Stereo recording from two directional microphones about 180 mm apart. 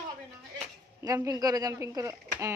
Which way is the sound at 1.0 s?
20° right (ahead or behind).